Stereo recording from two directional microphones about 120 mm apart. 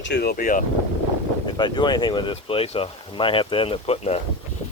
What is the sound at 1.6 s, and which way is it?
Speech, 40° left (ahead or behind).